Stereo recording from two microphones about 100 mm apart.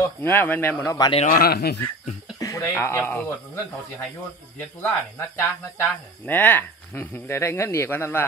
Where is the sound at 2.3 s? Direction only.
35° left (ahead or behind).